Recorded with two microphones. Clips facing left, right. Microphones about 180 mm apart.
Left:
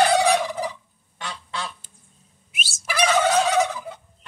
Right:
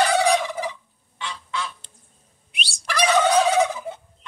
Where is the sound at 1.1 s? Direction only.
40° left (ahead or behind).